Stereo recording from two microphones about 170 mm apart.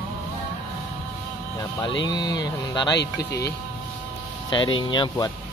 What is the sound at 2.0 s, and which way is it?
Speech, 25° left (ahead or behind).